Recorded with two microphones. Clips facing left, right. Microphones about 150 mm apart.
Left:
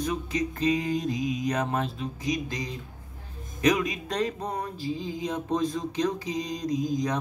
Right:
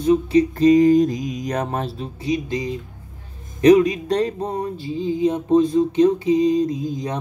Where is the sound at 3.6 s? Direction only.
35° right (ahead or behind).